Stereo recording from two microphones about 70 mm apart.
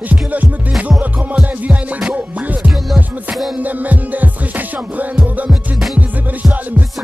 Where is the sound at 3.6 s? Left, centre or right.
Right.